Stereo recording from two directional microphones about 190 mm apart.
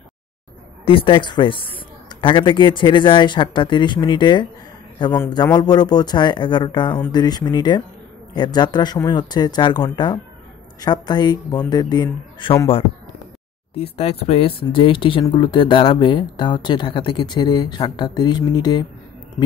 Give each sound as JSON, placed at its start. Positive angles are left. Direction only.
{"t": 0.8, "sound": "speech", "side_deg": 25}
{"t": 13.9, "sound": "speech", "side_deg": 35}